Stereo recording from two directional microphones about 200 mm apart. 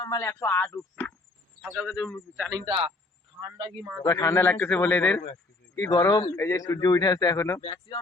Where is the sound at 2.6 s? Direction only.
25° right (ahead or behind).